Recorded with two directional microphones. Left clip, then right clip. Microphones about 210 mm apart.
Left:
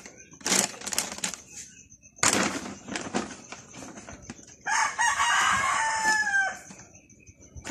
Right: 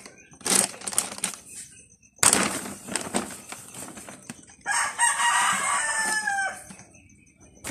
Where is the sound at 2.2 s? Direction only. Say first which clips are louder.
Right 2 dB; 50° right (ahead or behind).